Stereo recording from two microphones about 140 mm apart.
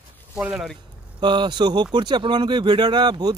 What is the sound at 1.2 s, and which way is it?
Speech, 30° right (ahead or behind).